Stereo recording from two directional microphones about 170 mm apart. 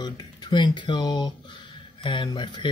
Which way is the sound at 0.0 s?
25° left (ahead or behind).